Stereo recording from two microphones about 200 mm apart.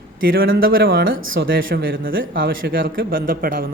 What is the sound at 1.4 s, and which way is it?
A man's voice, 55° right (ahead or behind).